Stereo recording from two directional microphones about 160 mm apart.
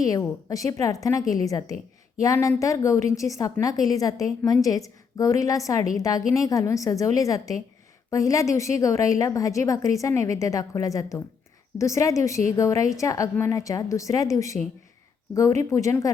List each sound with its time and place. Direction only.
0.0 s a woman's voice: 20° left (ahead or behind)
15.7 s a woman's voice: 20° left (ahead or behind)